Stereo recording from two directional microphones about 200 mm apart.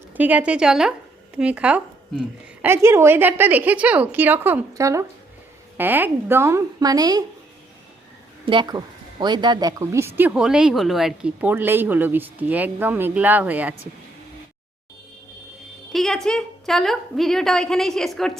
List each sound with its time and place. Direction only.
0.2 s a woman's voice: 10° right (ahead or behind)
8.4 s speech: 20° right (ahead or behind)
15.9 s a woman's voice: centre (ahead or behind)